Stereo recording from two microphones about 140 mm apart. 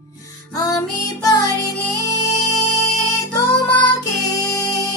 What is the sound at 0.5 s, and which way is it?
Music, 25° left (ahead or behind).